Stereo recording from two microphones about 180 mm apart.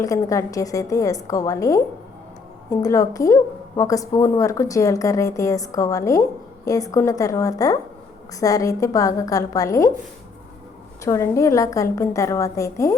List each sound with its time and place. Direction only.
0.0 s a woman's voice: 20° left (ahead or behind)
11.0 s a woman's voice: 15° left (ahead or behind)